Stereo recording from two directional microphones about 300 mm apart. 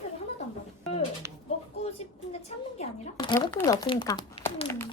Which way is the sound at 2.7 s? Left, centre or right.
Centre.